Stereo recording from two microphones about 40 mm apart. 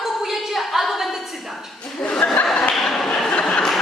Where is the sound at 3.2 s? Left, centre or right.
Left.